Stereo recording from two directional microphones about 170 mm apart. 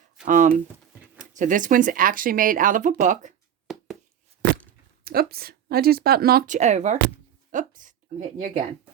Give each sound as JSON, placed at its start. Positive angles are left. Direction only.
{"t": 0.3, "sound": "speech", "side_deg": -50}
{"t": 3.7, "sound": "a sound", "side_deg": 0}
{"t": 5.0, "sound": "speech", "side_deg": -65}